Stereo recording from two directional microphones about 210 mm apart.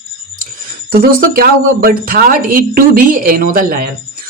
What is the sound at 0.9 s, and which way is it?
Speech, 45° right (ahead or behind).